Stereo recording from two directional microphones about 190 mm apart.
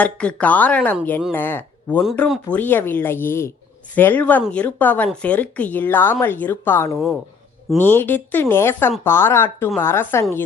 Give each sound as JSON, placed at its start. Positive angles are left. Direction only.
{"t": 0.0, "sound": "speech", "side_deg": 5}
{"t": 6.9, "sound": "speech", "side_deg": 0}